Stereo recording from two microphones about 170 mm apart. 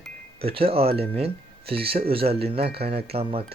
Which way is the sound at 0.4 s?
35° right (ahead or behind).